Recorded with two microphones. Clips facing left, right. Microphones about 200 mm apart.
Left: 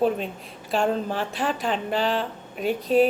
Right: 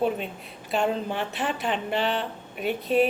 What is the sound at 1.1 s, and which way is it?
Speech, 40° left (ahead or behind).